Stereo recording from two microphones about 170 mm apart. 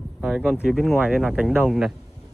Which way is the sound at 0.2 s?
5° right (ahead or behind).